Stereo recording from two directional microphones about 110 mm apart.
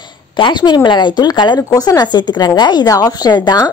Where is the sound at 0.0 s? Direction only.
45° left (ahead or behind).